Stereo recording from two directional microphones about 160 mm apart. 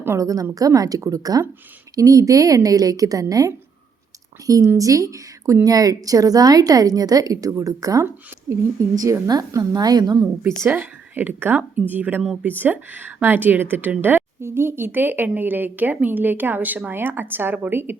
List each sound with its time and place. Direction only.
0.0 s a woman's voice: 20° right (ahead or behind)
10.4 s a woman's voice: 10° right (ahead or behind)